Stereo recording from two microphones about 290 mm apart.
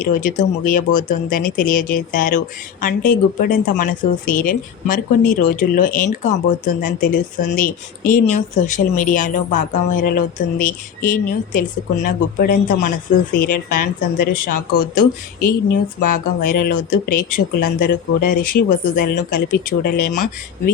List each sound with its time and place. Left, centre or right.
0.0 s speech: left
20.1 s speech: left